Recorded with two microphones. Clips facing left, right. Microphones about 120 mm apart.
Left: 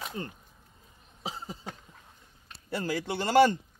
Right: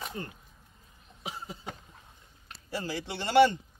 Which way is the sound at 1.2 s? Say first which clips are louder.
Left 2 dB; 30° left (ahead or behind).